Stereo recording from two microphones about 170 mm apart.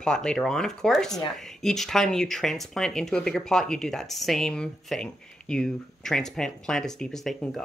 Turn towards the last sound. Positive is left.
turn(degrees=5)  # may be behind; listen again after turning